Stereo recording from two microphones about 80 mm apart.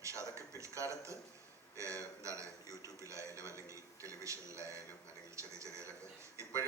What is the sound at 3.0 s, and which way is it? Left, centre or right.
Television, right.